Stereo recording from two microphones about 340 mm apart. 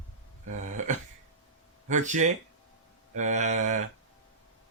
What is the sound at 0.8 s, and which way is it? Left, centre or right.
Speech, right.